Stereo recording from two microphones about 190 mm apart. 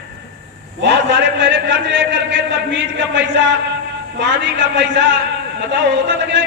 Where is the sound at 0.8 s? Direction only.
65° right (ahead or behind).